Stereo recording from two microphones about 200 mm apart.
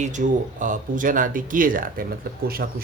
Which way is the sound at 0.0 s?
40° right (ahead or behind).